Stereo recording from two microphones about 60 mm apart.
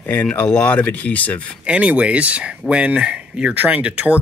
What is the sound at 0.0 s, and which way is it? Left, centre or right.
Speech, left.